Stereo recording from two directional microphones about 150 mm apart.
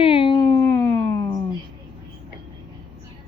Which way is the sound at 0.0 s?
35° left (ahead or behind).